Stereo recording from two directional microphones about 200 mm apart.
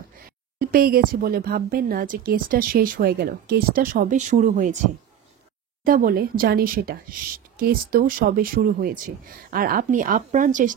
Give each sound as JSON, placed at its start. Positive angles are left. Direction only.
{"t": 0.6, "sound": "a woman's voice", "side_deg": -50}